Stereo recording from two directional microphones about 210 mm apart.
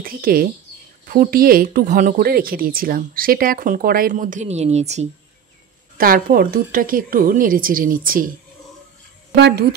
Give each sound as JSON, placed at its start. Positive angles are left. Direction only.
{"t": 0.0, "sound": "speech", "side_deg": -45}
{"t": 5.9, "sound": "a woman's voice", "side_deg": -45}
{"t": 9.3, "sound": "speech", "side_deg": -50}